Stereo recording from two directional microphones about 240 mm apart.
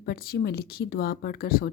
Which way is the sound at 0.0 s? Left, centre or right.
Left.